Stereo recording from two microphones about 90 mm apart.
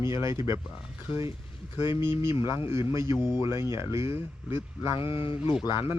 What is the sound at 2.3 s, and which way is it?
Speech, 70° left (ahead or behind).